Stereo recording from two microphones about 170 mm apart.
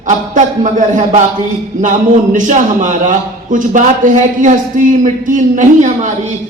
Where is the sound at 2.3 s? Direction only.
50° right (ahead or behind).